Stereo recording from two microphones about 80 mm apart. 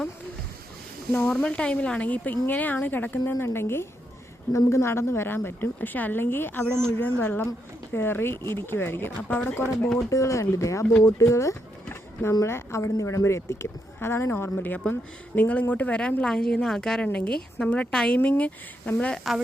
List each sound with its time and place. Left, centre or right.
1.1 s speech: centre
10.1 s speech: left; by 19.2 s centre